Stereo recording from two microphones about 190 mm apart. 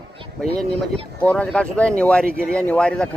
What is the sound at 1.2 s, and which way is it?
Speech, 5° left (ahead or behind).